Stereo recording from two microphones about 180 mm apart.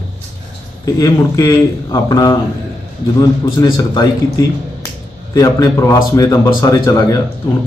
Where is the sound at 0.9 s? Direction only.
20° left (ahead or behind).